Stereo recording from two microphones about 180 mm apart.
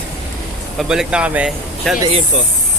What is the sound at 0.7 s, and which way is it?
Speech, 5° right (ahead or behind).